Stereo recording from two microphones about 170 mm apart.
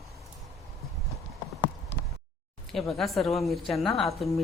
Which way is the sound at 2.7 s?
Centre (ahead or behind).